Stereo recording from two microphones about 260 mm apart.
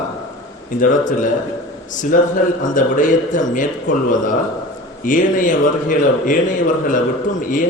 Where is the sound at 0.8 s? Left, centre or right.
Left.